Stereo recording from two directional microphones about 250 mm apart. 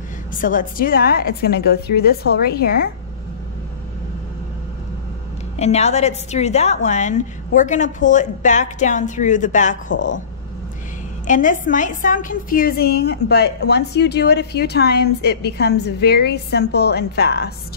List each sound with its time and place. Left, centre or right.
0.4 s a woman's voice: left
5.6 s a woman's voice: left
11.2 s a woman's voice: left